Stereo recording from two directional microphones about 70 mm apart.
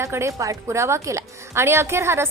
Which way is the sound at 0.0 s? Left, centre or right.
Right.